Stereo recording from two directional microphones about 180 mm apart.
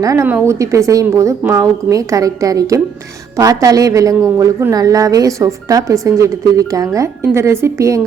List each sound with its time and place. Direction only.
0.0 s a woman's voice: 15° right (ahead or behind)